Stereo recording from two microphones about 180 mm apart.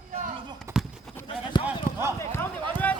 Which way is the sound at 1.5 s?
25° left (ahead or behind).